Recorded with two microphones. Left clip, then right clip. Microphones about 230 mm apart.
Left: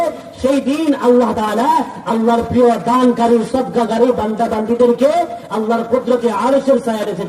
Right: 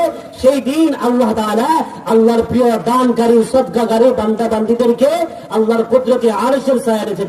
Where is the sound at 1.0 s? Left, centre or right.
Right.